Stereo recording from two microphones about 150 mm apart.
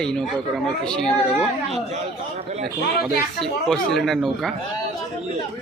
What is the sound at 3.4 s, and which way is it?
Speech, centre (ahead or behind).